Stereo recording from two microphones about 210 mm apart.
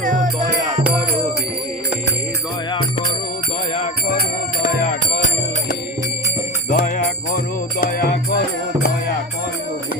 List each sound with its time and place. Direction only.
0.0 s music: 40° right (ahead or behind)
4.6 s music: 45° left (ahead or behind)
6.7 s jingle bell: 40° left (ahead or behind)
7.8 s music: 40° left (ahead or behind)